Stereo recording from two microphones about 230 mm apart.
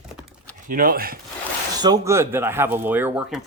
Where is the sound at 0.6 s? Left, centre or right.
Right.